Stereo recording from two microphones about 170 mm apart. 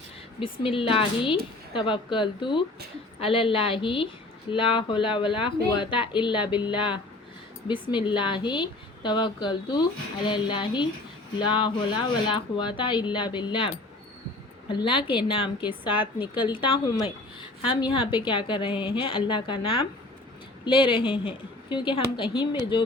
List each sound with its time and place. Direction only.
0.6 s a woman's voice: 30° left (ahead or behind)
14.7 s a woman's voice: 30° left (ahead or behind)